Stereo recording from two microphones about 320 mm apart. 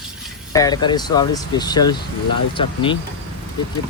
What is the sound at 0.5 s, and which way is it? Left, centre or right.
Speech, centre.